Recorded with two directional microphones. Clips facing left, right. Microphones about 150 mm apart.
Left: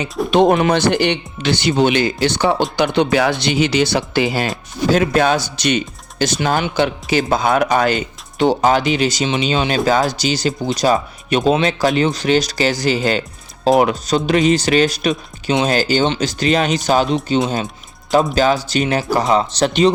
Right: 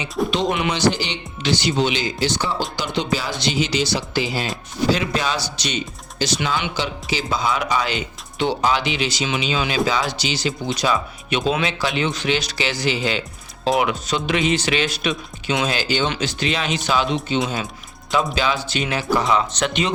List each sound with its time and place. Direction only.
0.3 s speech: 55° left (ahead or behind)
18.3 s speech: 40° left (ahead or behind)